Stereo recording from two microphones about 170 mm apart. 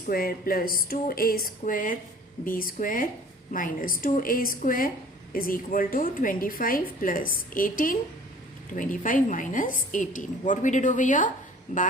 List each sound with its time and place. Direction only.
0.1 s a woman's voice: 60° left (ahead or behind)